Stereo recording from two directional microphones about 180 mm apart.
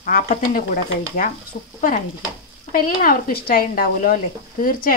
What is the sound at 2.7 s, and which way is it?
Speech, 50° left (ahead or behind).